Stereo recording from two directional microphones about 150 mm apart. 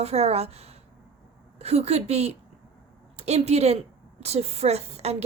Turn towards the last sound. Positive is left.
turn(degrees=-45)  # may be behind; listen again after turning